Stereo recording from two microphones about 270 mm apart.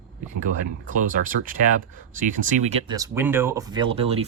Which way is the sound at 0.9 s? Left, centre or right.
Right.